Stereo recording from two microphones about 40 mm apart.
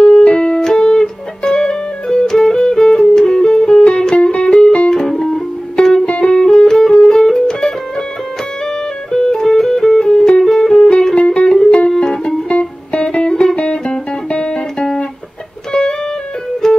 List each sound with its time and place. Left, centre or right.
0.0 s music: left
4.9 s music: centre
6.0 s music: left
12.0 s music: centre